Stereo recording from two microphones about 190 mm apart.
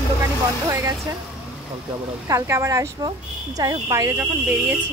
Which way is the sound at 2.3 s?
15° right (ahead or behind).